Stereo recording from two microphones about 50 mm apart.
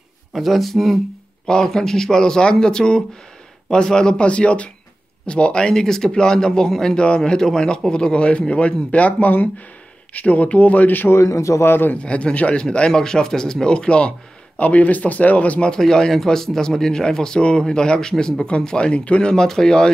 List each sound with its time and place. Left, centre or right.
0.3 s speech: centre
1.5 s speech: centre; by 11.1 s left
11.1 s a man's voice: left
11.6 s a man's voice: left
12.0 s speech: left
14.6 s speech: left
15.7 s speech: centre
19.3 s speech: centre